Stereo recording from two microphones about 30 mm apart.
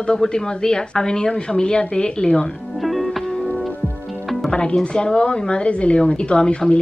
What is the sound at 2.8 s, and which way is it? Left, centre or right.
Music, centre.